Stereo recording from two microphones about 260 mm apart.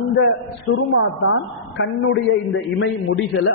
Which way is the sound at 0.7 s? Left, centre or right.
Left.